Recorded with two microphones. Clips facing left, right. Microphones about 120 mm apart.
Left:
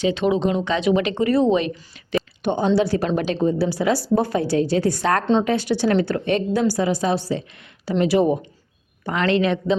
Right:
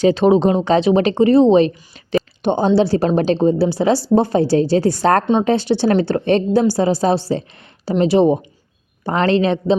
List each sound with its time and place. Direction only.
0.0 s a woman's voice: 35° right (ahead or behind)